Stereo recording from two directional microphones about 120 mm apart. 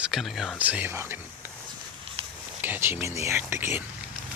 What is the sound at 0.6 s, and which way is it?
Speech, 15° right (ahead or behind).